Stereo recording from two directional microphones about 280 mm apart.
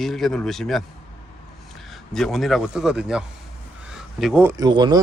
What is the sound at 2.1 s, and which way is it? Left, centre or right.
Speech, centre.